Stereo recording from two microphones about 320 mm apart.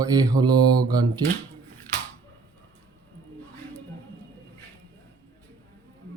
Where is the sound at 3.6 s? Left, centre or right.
Centre.